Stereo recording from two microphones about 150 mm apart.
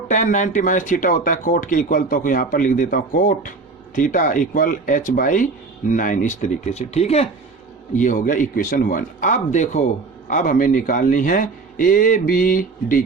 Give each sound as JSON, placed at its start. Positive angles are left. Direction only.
{"t": 0.1, "sound": "speech", "side_deg": 55}
{"t": 7.9, "sound": "speech", "side_deg": 60}